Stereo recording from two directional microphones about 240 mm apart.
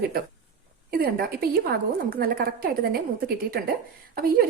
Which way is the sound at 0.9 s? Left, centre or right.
Right.